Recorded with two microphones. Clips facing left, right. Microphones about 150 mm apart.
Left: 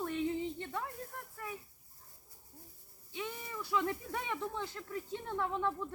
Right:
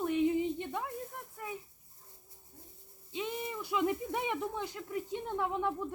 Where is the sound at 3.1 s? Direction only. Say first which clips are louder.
Right 5 dB; 20° right (ahead or behind).